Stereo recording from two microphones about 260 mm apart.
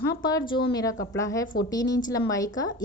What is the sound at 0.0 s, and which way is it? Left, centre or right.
A woman's voice, centre.